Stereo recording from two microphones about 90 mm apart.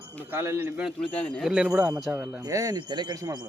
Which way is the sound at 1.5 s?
10° right (ahead or behind).